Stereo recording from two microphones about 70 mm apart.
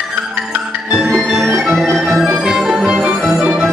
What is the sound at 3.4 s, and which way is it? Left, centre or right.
Music, centre.